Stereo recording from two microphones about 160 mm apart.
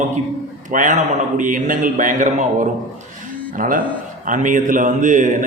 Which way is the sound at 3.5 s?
60° right (ahead or behind).